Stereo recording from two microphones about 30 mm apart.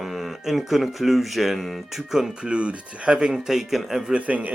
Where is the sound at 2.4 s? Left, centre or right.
Right.